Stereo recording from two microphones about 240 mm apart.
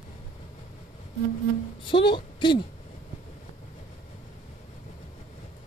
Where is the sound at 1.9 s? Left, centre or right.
Centre.